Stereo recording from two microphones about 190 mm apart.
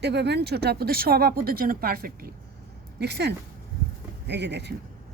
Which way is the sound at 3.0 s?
60° right (ahead or behind).